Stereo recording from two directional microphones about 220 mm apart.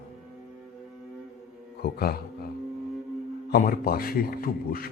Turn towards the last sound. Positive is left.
turn(degrees=40)  # may be behind; listen again after turning